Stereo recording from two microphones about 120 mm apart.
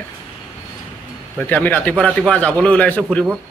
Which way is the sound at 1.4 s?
15° left (ahead or behind).